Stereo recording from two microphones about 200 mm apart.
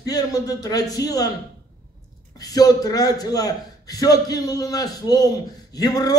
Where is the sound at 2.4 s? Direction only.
20° left (ahead or behind).